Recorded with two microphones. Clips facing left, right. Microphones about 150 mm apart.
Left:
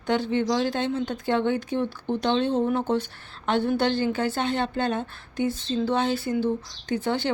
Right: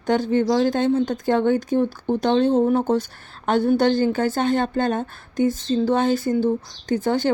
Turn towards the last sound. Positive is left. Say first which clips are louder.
# right 5 dB
turn(degrees=-45)  # may be behind; listen again after turning